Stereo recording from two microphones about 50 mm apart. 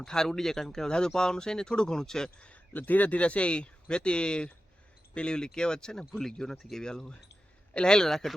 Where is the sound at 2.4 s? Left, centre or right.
Left.